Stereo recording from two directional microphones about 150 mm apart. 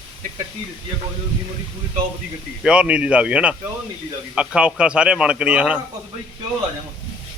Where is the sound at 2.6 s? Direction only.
5° right (ahead or behind).